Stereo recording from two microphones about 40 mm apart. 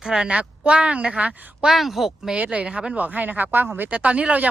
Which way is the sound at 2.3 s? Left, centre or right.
Right.